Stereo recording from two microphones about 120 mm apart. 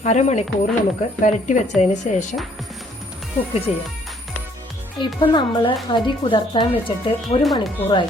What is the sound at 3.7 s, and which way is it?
Speech, 60° left (ahead or behind).